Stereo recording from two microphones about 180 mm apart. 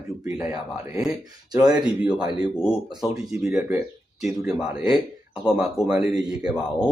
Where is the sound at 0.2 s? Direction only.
20° right (ahead or behind).